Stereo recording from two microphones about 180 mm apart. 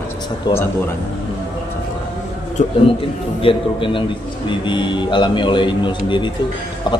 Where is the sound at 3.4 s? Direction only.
30° left (ahead or behind).